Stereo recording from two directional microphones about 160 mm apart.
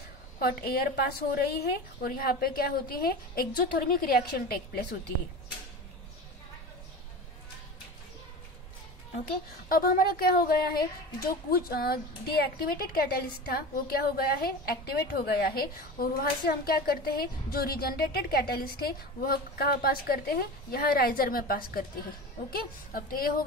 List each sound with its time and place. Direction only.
0.4 s speech: 70° left (ahead or behind)
9.7 s speech: 65° left (ahead or behind)